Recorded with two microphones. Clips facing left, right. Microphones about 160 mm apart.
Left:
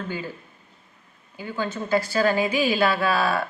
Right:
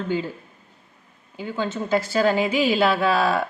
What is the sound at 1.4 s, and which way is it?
A woman's voice, 20° right (ahead or behind).